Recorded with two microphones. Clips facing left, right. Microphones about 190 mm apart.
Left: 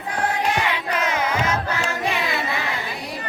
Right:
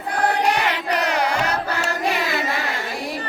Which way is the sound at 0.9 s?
70° right (ahead or behind).